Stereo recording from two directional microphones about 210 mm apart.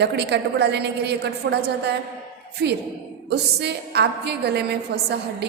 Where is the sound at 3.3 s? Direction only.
50° right (ahead or behind).